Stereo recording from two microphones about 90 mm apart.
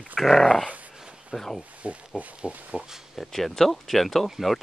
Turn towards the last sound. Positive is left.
turn(degrees=0)  # may be behind; listen again after turning